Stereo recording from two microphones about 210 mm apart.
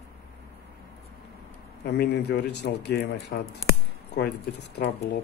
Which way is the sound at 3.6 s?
55° left (ahead or behind).